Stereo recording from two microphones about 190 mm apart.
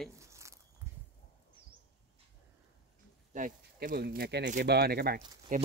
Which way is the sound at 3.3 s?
45° right (ahead or behind).